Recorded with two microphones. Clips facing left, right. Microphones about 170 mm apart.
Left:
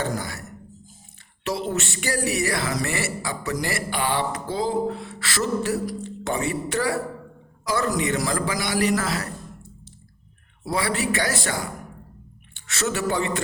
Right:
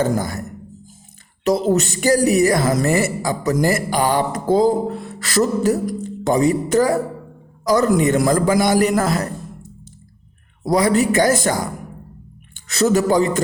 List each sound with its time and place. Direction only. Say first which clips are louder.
0.0 s speech: right 8 dB; 45° right (ahead or behind)
1.5 s speech: right 10 dB; 40° right (ahead or behind)
10.6 s a man's voice: right 9 dB; 40° right (ahead or behind)